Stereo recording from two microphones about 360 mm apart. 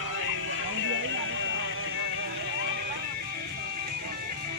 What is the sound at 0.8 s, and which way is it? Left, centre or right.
Music, right.